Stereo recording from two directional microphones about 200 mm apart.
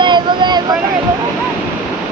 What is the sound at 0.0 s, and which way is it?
Vehicle, 20° right (ahead or behind).